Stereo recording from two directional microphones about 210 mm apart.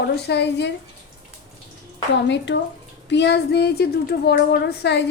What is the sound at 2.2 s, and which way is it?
A woman's voice, 55° left (ahead or behind).